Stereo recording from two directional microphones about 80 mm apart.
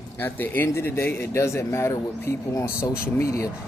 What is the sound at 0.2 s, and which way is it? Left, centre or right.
A man's voice, left.